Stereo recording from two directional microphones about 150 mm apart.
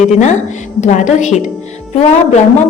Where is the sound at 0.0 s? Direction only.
50° left (ahead or behind).